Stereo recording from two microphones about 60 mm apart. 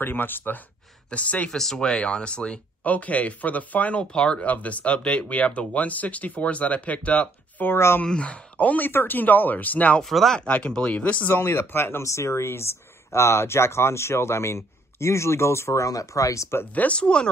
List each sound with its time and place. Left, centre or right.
0.0 s speech: left
1.1 s speech: left
7.7 s speech: left
8.0 s speech: centre
10.0 s speech: centre
10.4 s speech: centre; by 12.0 s left
12.0 s speech: left
16.7 s speech: left